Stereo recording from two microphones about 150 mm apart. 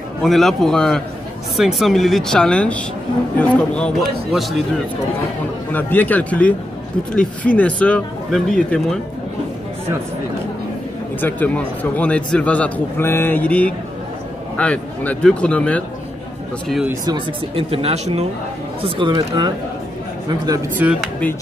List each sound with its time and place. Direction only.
0.2 s speech: centre (ahead or behind)
5.7 s a man's voice: 10° left (ahead or behind)
11.1 s a man's voice: 10° left (ahead or behind)
17.0 s speech: 25° right (ahead or behind)
17.6 s speech: 45° right (ahead or behind); by 20.6 s 25° right (ahead or behind)
21.0 s a man's voice: 10° left (ahead or behind)